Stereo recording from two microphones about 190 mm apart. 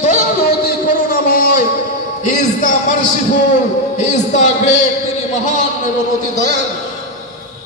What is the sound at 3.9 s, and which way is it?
Speech, 40° left (ahead or behind).